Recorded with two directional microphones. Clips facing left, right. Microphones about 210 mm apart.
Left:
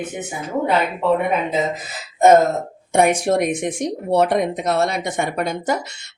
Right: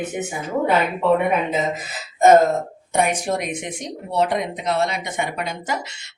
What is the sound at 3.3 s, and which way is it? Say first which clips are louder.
A woman's voice: left 6 dB; 55° left (ahead or behind).